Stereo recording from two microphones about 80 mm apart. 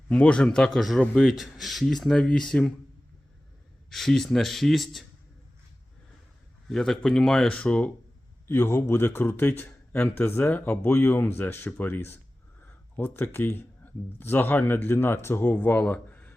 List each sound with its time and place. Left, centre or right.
0.1 s a man's voice: centre
3.8 s speech: centre
6.7 s speech: centre
7.4 s a man's voice: centre
8.4 s speech: left
15.4 s speech: centre